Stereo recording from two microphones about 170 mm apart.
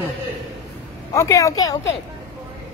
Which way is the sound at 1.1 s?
20° left (ahead or behind).